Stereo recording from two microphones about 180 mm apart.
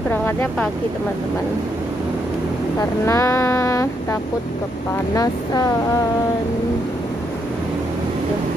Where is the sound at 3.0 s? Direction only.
15° left (ahead or behind).